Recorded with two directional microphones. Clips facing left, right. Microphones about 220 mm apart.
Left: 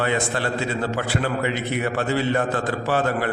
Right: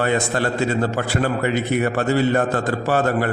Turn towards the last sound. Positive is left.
turn(degrees=-45)  # may be behind; listen again after turning